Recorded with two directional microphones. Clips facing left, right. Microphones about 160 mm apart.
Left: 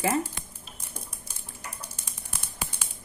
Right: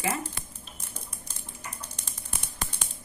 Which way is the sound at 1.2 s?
10° left (ahead or behind).